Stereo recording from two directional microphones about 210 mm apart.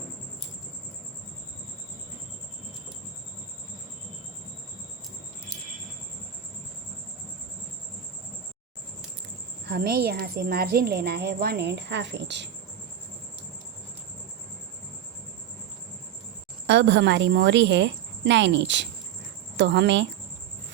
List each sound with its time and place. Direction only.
9.6 s a woman's voice: 50° right (ahead or behind)
16.6 s a woman's voice: 55° right (ahead or behind)